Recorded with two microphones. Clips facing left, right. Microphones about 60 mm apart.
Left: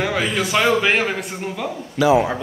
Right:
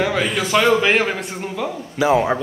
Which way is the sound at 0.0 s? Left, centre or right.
Centre.